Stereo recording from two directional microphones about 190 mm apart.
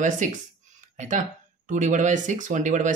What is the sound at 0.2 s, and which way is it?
Speech, 40° right (ahead or behind).